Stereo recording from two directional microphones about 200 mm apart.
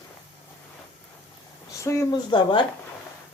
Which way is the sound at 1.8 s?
15° left (ahead or behind).